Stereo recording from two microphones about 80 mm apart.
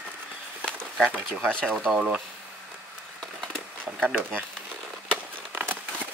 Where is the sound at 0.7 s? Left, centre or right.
Centre.